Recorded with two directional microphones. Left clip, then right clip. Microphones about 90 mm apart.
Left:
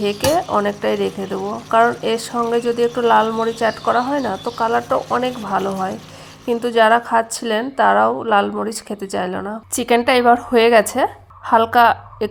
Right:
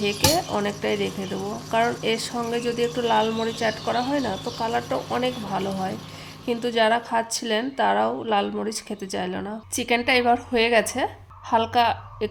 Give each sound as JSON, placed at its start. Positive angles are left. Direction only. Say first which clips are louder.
{"t": 0.0, "sound": "a woman's voice", "louder": "left 5 dB", "side_deg": 30}
{"t": 9.7, "sound": "a woman's voice", "louder": "left 6 dB", "side_deg": 60}